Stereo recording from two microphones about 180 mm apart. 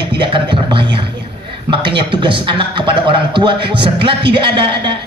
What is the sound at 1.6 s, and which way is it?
Speech, 25° right (ahead or behind).